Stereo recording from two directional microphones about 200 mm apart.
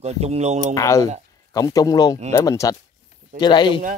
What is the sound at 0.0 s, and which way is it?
Speech, 30° right (ahead or behind).